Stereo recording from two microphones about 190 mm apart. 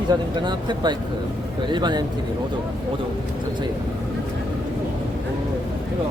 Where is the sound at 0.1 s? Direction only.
20° right (ahead or behind).